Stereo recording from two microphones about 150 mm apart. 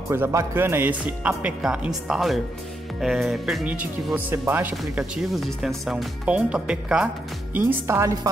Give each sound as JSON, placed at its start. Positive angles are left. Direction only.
{"t": 0.1, "sound": "speech", "side_deg": -20}
{"t": 7.5, "sound": "a woman's voice", "side_deg": -15}